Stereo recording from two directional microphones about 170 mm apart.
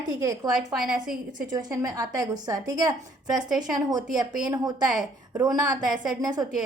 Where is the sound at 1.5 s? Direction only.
20° right (ahead or behind).